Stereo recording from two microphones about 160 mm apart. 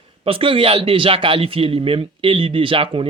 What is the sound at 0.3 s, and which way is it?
Speech, 35° right (ahead or behind).